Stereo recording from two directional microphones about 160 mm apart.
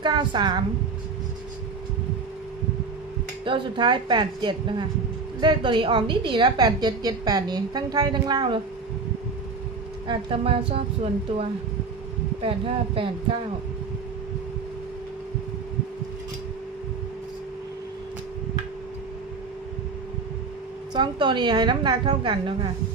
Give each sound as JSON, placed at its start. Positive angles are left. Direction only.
{"t": 0.0, "sound": "a woman's voice", "side_deg": -30}
{"t": 3.4, "sound": "a woman's voice", "side_deg": -30}
{"t": 10.1, "sound": "a woman's voice", "side_deg": -35}
{"t": 20.9, "sound": "a woman's voice", "side_deg": -30}